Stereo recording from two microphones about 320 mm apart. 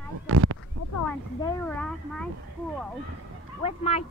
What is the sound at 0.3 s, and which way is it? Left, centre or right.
Speech, right.